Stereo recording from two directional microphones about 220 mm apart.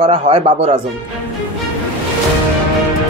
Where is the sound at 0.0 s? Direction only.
25° right (ahead or behind).